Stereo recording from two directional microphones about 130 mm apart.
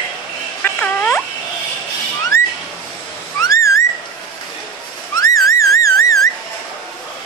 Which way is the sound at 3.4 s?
25° left (ahead or behind).